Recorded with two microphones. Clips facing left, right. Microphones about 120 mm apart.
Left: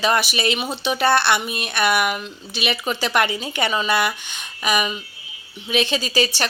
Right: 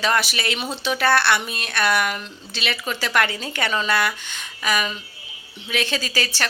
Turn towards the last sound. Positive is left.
turn(degrees=20)  # may be behind; listen again after turning